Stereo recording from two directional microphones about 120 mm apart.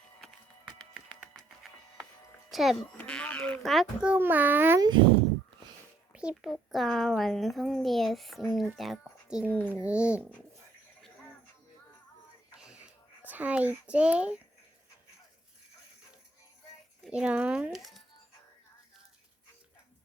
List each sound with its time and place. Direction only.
0.9 s a sound: 5° right (ahead or behind)
2.5 s speech: centre (ahead or behind)
2.8 s a child's voice: 10° left (ahead or behind)
4.1 s speech: 15° right (ahead or behind)
4.8 s speech: 40° right (ahead or behind)
6.3 s speech: centre (ahead or behind)
9.5 s a child's voice: 10° left (ahead or behind)
9.8 s speech: 10° right (ahead or behind)
12.5 s a sound: 10° right (ahead or behind)
13.8 s speech: 10° right (ahead or behind)
17.1 s speech: 10° right (ahead or behind)